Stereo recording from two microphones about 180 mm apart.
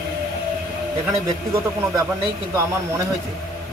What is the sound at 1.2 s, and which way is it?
Speech, 15° right (ahead or behind).